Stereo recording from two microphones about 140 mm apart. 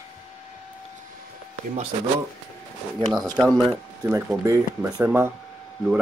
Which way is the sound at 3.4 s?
Centre (ahead or behind).